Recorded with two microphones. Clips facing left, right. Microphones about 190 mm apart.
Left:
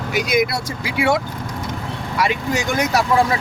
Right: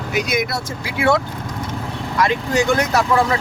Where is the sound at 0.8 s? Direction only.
15° left (ahead or behind).